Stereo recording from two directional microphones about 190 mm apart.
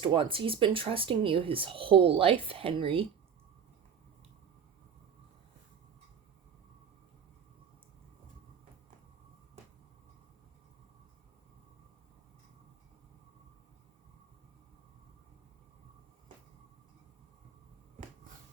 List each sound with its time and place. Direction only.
0.0 s speech: 25° right (ahead or behind)